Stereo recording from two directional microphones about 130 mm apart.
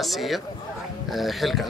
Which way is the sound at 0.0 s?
Centre (ahead or behind).